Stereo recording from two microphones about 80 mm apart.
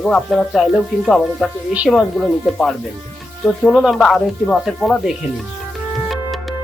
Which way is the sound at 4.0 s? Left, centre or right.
Centre.